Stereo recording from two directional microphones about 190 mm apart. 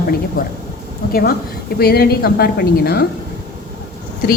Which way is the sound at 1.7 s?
55° left (ahead or behind).